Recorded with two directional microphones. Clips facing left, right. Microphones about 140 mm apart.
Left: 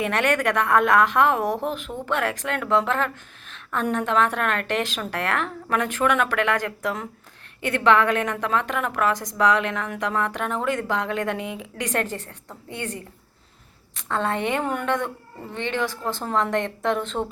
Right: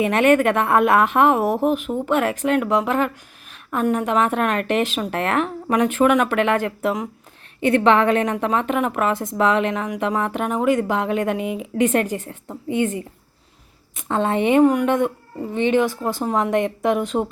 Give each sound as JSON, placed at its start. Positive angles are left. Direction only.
{"t": 0.0, "sound": "a woman's voice", "side_deg": -15}